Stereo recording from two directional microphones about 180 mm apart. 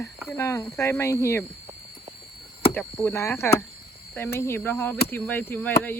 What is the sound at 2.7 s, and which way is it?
Speech, 10° left (ahead or behind).